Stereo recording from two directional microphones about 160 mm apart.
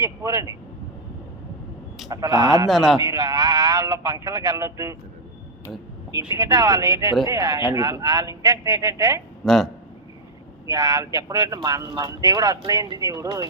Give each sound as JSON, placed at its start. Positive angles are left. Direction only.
{"t": 0.0, "sound": "speech", "side_deg": -20}
{"t": 2.0, "sound": "speech", "side_deg": -25}
{"t": 2.6, "sound": "a man's voice", "side_deg": 0}
{"t": 3.0, "sound": "speech", "side_deg": -20}
{"t": 6.3, "sound": "speech", "side_deg": -20}
{"t": 9.4, "sound": "a man's voice", "side_deg": 0}
{"t": 10.7, "sound": "speech", "side_deg": -20}